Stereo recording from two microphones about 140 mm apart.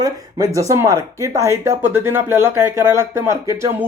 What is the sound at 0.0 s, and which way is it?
Speech, 25° right (ahead or behind).